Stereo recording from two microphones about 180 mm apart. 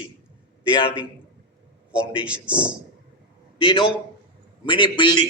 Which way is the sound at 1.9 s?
5° right (ahead or behind).